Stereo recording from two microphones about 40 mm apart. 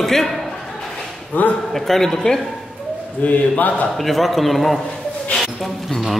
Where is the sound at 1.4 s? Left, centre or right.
Left.